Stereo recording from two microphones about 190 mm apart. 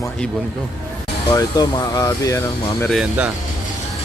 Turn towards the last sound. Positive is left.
turn(degrees=-5)  # may be behind; listen again after turning